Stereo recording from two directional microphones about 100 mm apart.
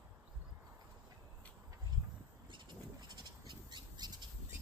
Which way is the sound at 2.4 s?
50° right (ahead or behind).